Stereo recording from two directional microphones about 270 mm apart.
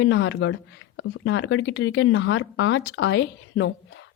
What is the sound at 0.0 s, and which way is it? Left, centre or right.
Speech, left.